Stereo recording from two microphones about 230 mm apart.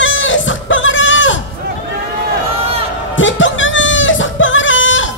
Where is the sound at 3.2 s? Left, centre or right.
Left.